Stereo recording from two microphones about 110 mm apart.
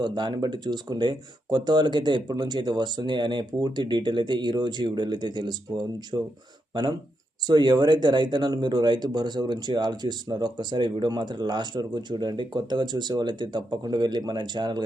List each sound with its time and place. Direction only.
0.0 s speech: 45° right (ahead or behind)
7.4 s speech: 40° right (ahead or behind)